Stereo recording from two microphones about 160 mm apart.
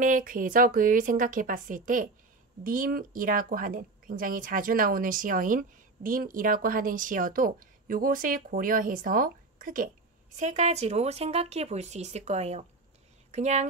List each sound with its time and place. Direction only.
0.0 s speech: 60° right (ahead or behind)
10.3 s speech: 50° right (ahead or behind)